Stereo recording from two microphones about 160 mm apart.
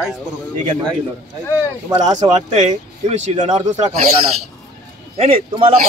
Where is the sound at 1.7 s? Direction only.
25° right (ahead or behind).